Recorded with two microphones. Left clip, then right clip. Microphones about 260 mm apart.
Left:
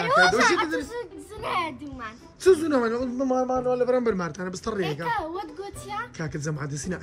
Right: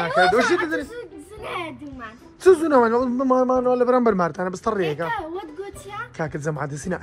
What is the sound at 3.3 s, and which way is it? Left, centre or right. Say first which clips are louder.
Speech: right 6 dB; right.